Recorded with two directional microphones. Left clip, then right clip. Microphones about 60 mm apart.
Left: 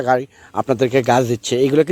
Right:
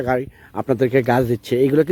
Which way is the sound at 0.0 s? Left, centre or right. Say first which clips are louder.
Left 4 dB; centre.